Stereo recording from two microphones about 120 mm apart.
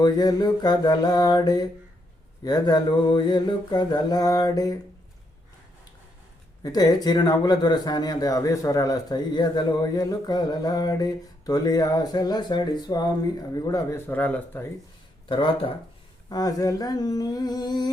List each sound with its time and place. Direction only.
0.0 s speech: 35° left (ahead or behind)
6.6 s speech: 35° left (ahead or behind)
14.1 s speech: 15° left (ahead or behind)
15.3 s speech: 45° left (ahead or behind)
16.3 s speech: 30° left (ahead or behind)